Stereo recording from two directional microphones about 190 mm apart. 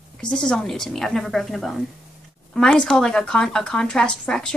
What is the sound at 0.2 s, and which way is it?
Speech, 5° left (ahead or behind).